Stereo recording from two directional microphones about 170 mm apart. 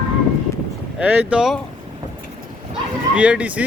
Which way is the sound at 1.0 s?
10° right (ahead or behind).